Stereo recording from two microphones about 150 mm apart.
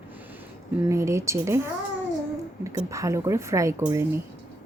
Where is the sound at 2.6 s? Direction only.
20° right (ahead or behind).